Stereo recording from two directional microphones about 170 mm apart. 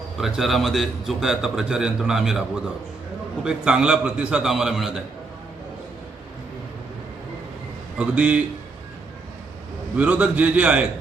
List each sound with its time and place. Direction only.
0.2 s a man's voice: centre (ahead or behind)
7.9 s a man's voice: 5° right (ahead or behind)
9.9 s a man's voice: 10° right (ahead or behind)